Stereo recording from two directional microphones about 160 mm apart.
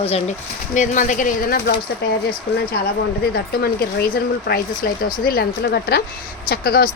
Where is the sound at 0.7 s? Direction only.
50° left (ahead or behind).